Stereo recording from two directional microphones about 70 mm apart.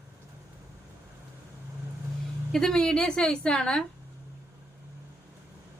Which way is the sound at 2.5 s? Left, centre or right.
Centre.